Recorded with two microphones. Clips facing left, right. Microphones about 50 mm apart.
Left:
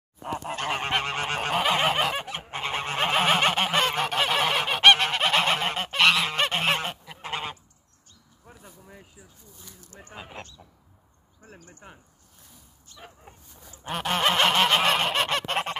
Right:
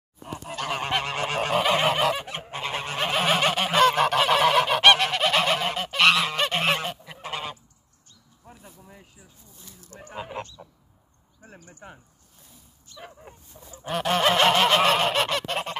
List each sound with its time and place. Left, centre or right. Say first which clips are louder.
0.2 s goose: left 2 dB; left
2.2 s goose: even; centre
2.5 s goose: left 1 dB; centre
5.6 s goose: right 1 dB; left
5.9 s goose: right 1 dB; centre
6.7 s goose: right 1 dB; left
8.5 s a sound: right 1 dB; centre
10.1 s a sound: right 7 dB; centre
13.8 s honk: right 2 dB; centre
14.9 s goose: right 2 dB; centre
15.2 s goose: left 1 dB; left